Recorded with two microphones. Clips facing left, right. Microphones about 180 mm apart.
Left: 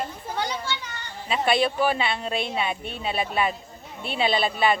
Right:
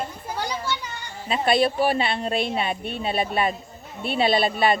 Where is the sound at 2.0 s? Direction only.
40° right (ahead or behind).